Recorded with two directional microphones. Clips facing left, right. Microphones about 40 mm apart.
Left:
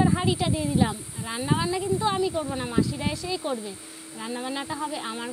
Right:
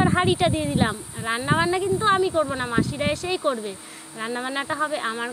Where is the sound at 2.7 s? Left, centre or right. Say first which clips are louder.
Right 2 dB; right.